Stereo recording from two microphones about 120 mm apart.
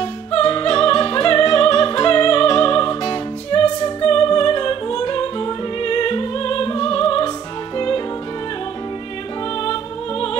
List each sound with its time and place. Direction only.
0.4 s music: 40° left (ahead or behind)
6.8 s opera: 25° left (ahead or behind)